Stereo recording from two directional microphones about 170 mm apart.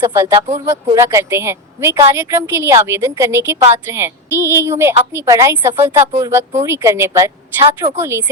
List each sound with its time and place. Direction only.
0.0 s a woman's voice: 15° right (ahead or behind)